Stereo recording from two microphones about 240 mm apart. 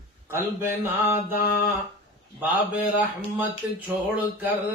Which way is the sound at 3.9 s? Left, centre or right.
Centre.